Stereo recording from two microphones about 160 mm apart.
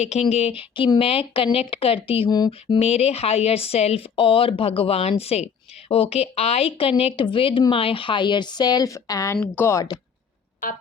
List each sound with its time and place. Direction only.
0.0 s a woman's voice: 45° left (ahead or behind); by 10.0 s 20° left (ahead or behind)